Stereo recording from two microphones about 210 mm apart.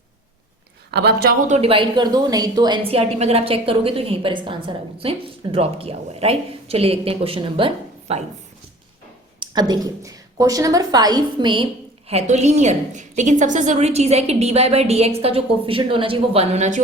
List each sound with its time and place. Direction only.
0.9 s speech: 50° right (ahead or behind)
1.5 s a woman's voice: 30° right (ahead or behind)
9.4 s a woman's voice: 20° right (ahead or behind)